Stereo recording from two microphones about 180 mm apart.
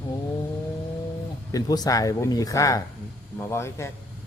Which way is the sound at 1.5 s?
20° left (ahead or behind).